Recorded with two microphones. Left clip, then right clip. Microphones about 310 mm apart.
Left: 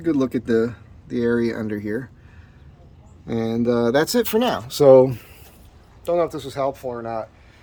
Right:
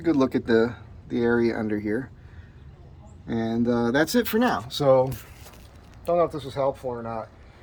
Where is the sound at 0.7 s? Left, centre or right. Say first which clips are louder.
Left 1 dB; left.